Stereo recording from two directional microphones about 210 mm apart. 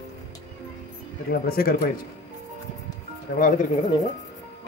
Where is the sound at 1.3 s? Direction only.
45° left (ahead or behind).